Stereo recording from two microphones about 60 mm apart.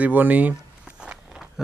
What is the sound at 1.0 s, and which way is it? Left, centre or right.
Walk, centre.